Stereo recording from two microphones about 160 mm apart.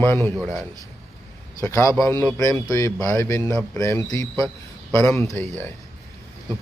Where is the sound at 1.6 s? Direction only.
20° left (ahead or behind).